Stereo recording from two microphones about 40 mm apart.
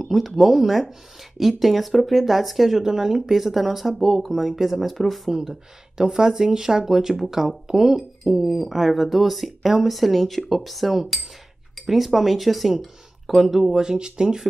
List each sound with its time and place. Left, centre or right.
0.0 s speech: centre
5.9 s speech: centre
13.7 s speech: centre